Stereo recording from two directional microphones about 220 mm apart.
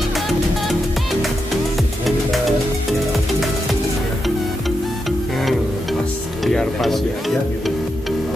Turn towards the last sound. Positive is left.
turn(degrees=0)  # may be behind; listen again after turning